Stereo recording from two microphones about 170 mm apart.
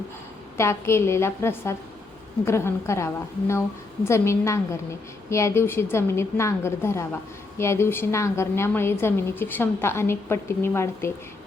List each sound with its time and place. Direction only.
0.5 s a woman's voice: 15° left (ahead or behind)